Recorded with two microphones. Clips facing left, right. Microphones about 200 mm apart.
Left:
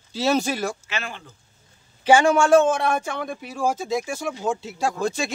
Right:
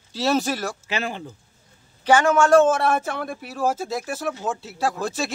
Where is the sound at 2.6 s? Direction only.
5° right (ahead or behind).